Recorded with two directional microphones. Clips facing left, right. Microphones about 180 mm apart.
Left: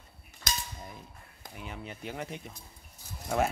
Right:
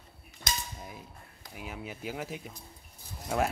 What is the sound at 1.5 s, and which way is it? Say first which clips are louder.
Cutlery: right 1 dB; 5° right (ahead or behind).